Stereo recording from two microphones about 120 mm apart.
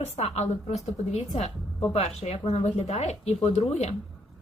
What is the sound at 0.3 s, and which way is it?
Speech, 70° left (ahead or behind).